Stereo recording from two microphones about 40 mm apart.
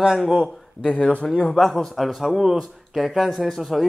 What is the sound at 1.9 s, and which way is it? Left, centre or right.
Speech, centre.